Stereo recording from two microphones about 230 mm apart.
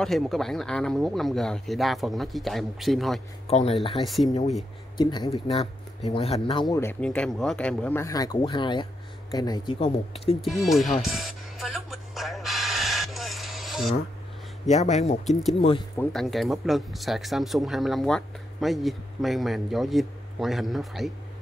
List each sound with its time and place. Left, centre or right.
0.0 s speech: centre
3.4 s speech: left
10.4 s music: centre
14.7 s speech: left
16.0 s speech: centre